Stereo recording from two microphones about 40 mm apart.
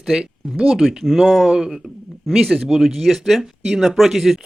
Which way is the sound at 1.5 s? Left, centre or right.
Centre.